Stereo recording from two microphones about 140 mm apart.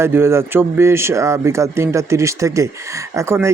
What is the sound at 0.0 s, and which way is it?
Speech, 20° right (ahead or behind).